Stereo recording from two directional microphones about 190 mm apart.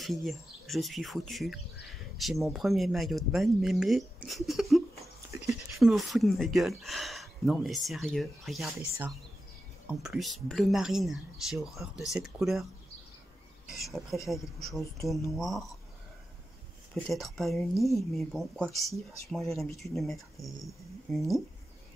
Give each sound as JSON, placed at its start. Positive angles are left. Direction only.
{"t": 0.0, "sound": "speech", "side_deg": 0}
{"t": 5.3, "sound": "a sound", "side_deg": -15}
{"t": 5.8, "sound": "speech", "side_deg": 0}
{"t": 14.1, "sound": "speech", "side_deg": 0}
{"t": 15.3, "sound": "speech", "side_deg": 0}
{"t": 16.9, "sound": "speech", "side_deg": 0}